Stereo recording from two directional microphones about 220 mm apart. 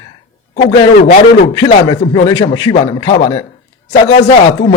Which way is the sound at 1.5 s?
15° left (ahead or behind).